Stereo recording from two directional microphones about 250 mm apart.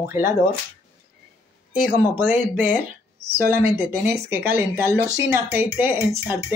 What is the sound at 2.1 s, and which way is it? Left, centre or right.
Speech, centre.